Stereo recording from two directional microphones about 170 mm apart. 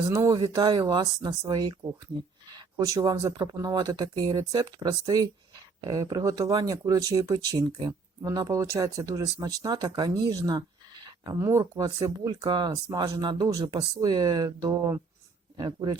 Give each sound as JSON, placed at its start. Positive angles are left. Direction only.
{"t": 0.1, "sound": "speech", "side_deg": -20}